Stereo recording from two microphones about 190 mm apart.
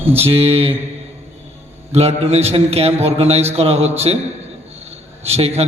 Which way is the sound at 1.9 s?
35° right (ahead or behind).